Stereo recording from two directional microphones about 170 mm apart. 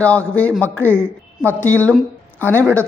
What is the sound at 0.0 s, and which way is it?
Speech, 10° left (ahead or behind).